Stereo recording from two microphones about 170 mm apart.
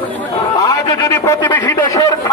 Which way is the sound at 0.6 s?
20° left (ahead or behind).